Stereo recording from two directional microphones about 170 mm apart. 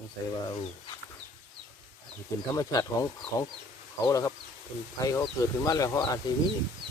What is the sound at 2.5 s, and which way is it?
Speech, 20° left (ahead or behind).